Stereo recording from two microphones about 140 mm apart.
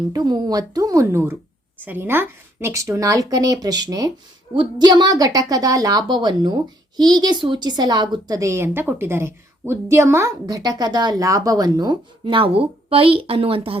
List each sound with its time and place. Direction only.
0.1 s a woman's voice: 30° right (ahead or behind)